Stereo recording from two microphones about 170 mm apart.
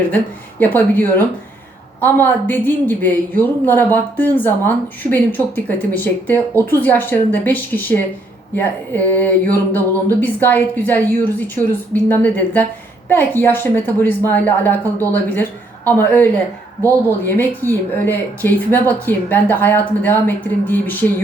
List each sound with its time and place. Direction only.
0.6 s a woman's voice: 10° left (ahead or behind)